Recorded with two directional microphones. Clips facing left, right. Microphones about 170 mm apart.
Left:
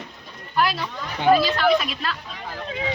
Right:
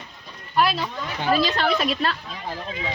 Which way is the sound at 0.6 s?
20° right (ahead or behind).